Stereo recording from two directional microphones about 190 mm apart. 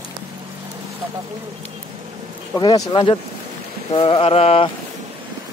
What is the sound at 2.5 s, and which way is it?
Speech, 20° left (ahead or behind).